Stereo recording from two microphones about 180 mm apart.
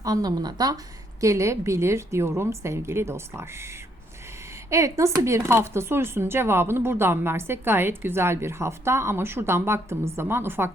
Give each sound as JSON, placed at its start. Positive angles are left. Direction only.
{"t": 0.0, "sound": "speech", "side_deg": -20}
{"t": 4.7, "sound": "speech", "side_deg": -15}